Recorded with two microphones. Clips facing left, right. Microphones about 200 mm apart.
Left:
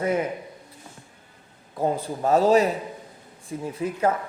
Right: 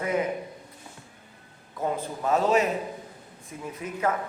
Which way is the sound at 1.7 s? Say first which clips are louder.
Left 4 dB; 30° left (ahead or behind).